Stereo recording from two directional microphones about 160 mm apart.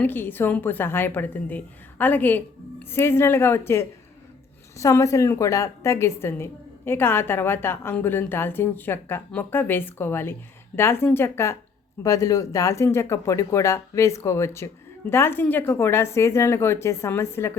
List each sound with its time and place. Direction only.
0.0 s a woman's voice: 10° left (ahead or behind)